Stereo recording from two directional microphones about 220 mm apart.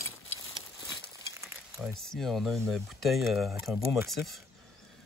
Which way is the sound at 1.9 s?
Centre (ahead or behind).